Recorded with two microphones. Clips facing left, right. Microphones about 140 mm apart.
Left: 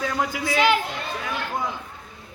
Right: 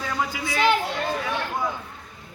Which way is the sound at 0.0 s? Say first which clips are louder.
Left 2 dB; 5° left (ahead or behind).